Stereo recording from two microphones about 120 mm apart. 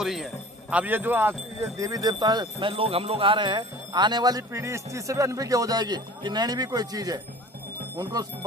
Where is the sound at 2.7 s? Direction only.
50° right (ahead or behind).